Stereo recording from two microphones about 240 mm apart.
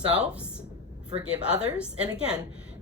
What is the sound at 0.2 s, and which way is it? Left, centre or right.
Speech, centre.